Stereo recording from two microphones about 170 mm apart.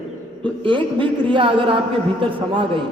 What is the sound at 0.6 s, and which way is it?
A man's voice, 30° right (ahead or behind).